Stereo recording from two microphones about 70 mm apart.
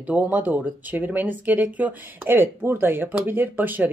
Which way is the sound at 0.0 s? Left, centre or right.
Centre.